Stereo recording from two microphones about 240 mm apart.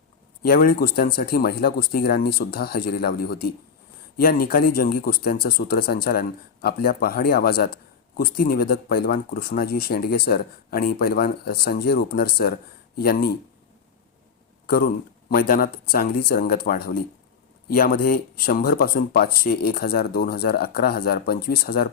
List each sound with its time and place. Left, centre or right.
0.4 s speech: left
14.7 s speech: left